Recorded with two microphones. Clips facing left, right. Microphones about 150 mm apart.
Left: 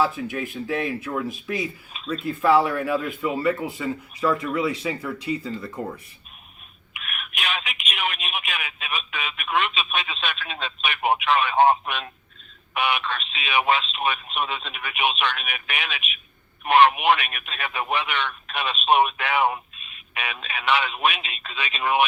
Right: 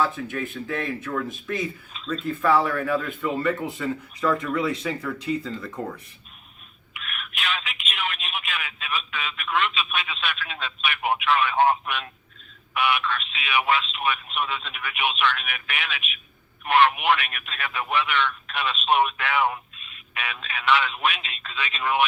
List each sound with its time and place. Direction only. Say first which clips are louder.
0.0 s speech: left 2 dB; 10° left (ahead or behind)
1.9 s speech: even; 15° left (ahead or behind)
6.9 s speech: left 1 dB; 15° left (ahead or behind)